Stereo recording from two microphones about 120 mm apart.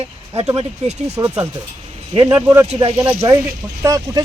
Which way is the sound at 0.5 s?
60° right (ahead or behind).